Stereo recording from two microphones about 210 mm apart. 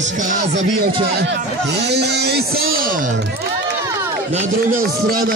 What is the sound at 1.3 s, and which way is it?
Speech, 55° right (ahead or behind).